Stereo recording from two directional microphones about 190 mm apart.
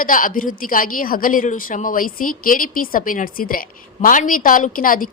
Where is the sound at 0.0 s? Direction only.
45° left (ahead or behind).